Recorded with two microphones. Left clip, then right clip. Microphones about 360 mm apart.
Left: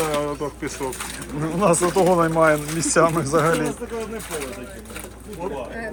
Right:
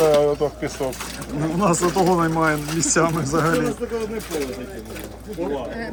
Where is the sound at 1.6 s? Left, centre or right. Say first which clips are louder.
Left 2 dB; centre.